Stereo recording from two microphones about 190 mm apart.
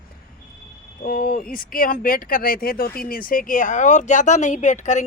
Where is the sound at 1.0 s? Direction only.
50° left (ahead or behind).